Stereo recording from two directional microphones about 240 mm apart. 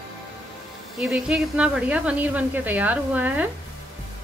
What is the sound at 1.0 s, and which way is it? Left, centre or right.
A woman's voice, centre.